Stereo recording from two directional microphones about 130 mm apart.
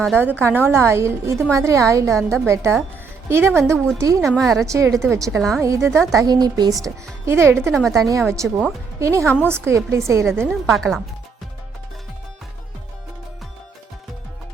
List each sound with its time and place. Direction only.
0.2 s speech: 15° right (ahead or behind)
4.3 s a woman's voice: centre (ahead or behind)
4.6 s speech: 25° right (ahead or behind)
5.4 s a woman's voice: centre (ahead or behind)
5.6 s speech: 20° right (ahead or behind)
7.7 s a woman's voice: centre (ahead or behind)
8.1 s speech: 20° right (ahead or behind)
10.4 s a woman's voice: centre (ahead or behind)